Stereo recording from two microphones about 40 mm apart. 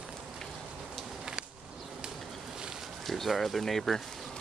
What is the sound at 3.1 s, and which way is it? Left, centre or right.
Speech, centre.